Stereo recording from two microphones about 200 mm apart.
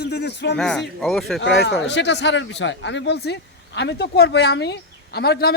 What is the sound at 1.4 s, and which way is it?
A man's voice, 65° left (ahead or behind).